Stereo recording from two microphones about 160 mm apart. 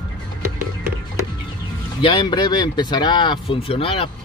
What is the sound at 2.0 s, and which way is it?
Speech, 30° left (ahead or behind).